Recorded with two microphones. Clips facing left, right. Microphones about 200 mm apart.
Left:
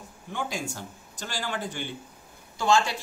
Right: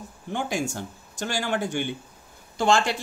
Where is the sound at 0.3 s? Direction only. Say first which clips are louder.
Right 5 dB; 70° right (ahead or behind).